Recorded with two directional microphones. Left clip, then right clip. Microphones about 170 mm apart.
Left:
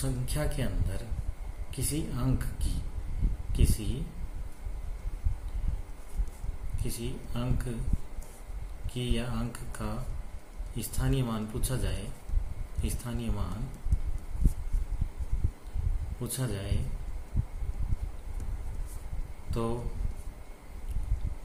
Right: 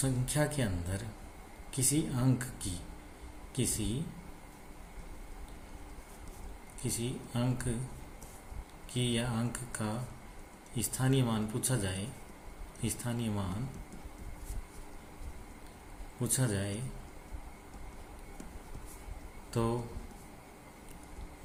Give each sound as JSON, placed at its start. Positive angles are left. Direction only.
{"t": 0.0, "sound": "speech", "side_deg": -20}
{"t": 6.8, "sound": "speech", "side_deg": -20}
{"t": 8.9, "sound": "speech", "side_deg": -20}
{"t": 16.2, "sound": "speech", "side_deg": -20}
{"t": 19.5, "sound": "speech", "side_deg": -20}